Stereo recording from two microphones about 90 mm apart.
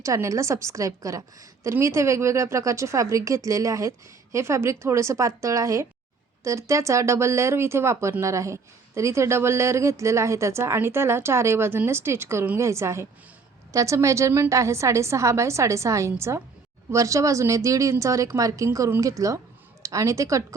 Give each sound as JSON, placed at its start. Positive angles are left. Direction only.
{"t": 0.0, "sound": "a woman's voice", "side_deg": -35}